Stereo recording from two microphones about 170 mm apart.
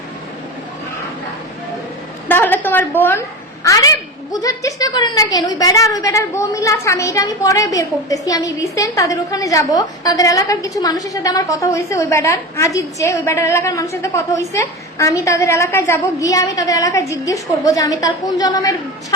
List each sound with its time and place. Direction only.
2.2 s a woman's voice: 10° left (ahead or behind)